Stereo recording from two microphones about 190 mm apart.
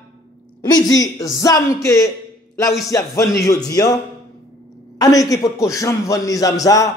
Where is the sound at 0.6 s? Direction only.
20° left (ahead or behind).